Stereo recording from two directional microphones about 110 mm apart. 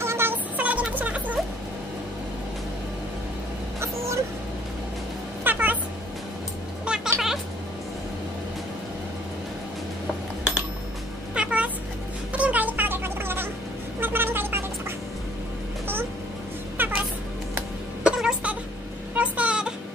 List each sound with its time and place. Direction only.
0.0 s music: 20° right (ahead or behind)
3.8 s a sound: 25° right (ahead or behind)
5.4 s cat: 15° right (ahead or behind)
6.9 s cat: 5° right (ahead or behind)
11.3 s cat: 10° right (ahead or behind)
12.3 s music: 10° right (ahead or behind)
13.9 s a sound: 20° right (ahead or behind)
16.7 s cat: 15° right (ahead or behind)
17.6 s music: 10° right (ahead or behind)
19.1 s a sound: 10° right (ahead or behind)